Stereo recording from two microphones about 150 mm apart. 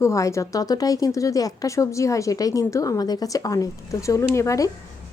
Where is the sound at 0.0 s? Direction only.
20° left (ahead or behind).